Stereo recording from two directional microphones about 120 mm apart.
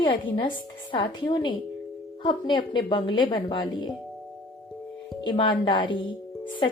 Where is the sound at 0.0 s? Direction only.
45° left (ahead or behind).